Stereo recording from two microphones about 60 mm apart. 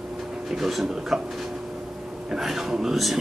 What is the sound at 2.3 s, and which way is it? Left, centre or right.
Speech, centre.